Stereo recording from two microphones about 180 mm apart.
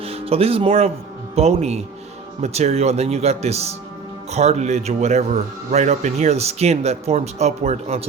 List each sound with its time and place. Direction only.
0.0 s speech: 35° right (ahead or behind)